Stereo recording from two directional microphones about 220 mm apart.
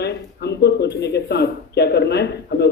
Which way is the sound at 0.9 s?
50° left (ahead or behind).